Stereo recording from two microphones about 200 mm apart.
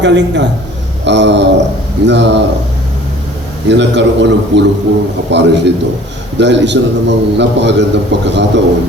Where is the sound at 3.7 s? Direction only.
60° right (ahead or behind).